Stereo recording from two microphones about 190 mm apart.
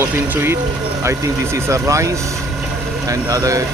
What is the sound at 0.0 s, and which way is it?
Speech, 10° right (ahead or behind).